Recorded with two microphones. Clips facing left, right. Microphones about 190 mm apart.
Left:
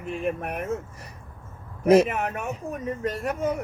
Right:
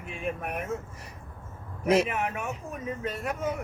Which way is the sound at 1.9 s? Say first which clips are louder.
Left 6 dB; 40° left (ahead or behind).